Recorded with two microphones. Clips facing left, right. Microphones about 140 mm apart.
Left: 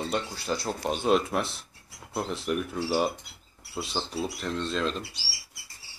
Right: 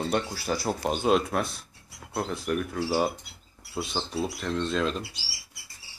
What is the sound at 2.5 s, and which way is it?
Speech, 5° left (ahead or behind).